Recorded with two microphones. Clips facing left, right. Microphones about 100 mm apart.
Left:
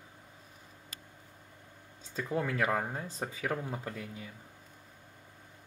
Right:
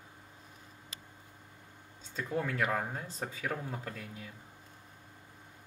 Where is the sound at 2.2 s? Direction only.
20° left (ahead or behind).